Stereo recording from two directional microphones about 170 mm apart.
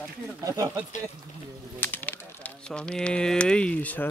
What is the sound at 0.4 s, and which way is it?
Speech, 20° right (ahead or behind).